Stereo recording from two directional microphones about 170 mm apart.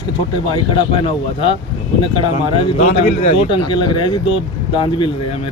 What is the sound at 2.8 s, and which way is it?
A man's voice, 40° left (ahead or behind).